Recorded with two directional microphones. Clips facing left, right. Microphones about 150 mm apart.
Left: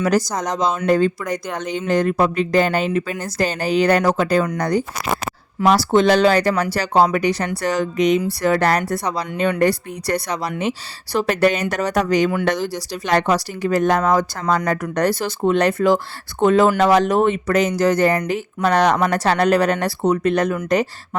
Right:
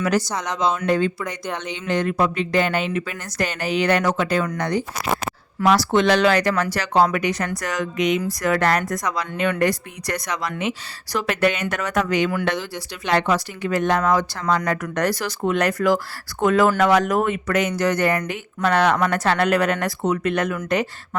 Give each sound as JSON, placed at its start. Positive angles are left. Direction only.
{"t": 0.0, "sound": "speech", "side_deg": 40}